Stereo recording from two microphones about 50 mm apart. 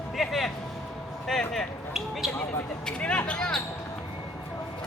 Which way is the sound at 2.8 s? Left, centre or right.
Left.